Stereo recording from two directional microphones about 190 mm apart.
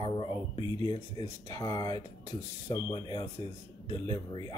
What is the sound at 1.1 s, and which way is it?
Speech, 20° left (ahead or behind).